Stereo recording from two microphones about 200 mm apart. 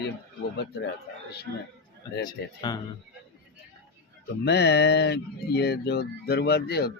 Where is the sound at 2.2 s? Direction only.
20° left (ahead or behind).